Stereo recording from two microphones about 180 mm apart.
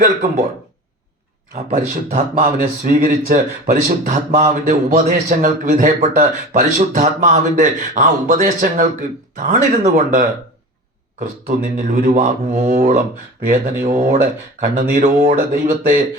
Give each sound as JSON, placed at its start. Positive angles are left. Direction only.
{"t": 0.0, "sound": "speech", "side_deg": -40}
{"t": 1.5, "sound": "speech", "side_deg": -40}